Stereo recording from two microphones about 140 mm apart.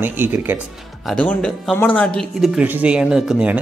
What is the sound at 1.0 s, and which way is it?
Speech, 5° left (ahead or behind).